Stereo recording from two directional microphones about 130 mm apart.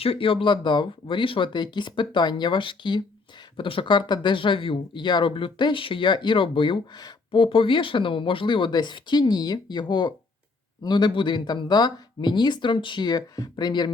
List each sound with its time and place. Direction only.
0.0 s speech: 45° left (ahead or behind)